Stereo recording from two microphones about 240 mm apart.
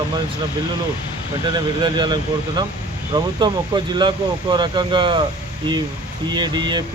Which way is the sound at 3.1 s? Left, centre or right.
Centre.